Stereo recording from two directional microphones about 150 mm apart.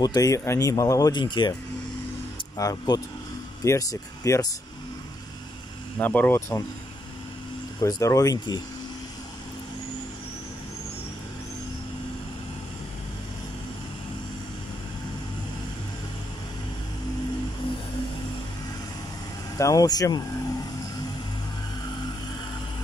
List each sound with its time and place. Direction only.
0.0 s speech: 25° left (ahead or behind)
2.5 s speech: 25° left (ahead or behind)
5.9 s speech: 10° left (ahead or behind)
7.8 s speech: 20° left (ahead or behind)
19.6 s speech: 25° left (ahead or behind)